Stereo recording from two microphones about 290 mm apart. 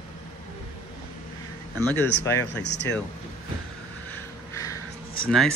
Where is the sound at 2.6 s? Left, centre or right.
Left.